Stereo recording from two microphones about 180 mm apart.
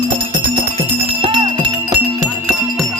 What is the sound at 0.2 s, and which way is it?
Music, 30° right (ahead or behind).